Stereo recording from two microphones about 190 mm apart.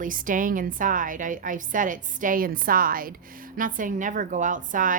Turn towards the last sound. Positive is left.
turn(degrees=-45)  # may be behind; listen again after turning